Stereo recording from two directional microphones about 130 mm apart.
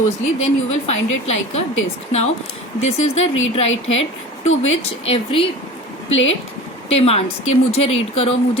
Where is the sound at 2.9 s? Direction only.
55° left (ahead or behind).